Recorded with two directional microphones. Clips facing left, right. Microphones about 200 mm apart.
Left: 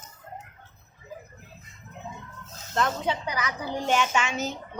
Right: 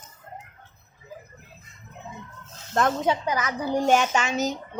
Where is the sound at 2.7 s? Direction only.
45° right (ahead or behind).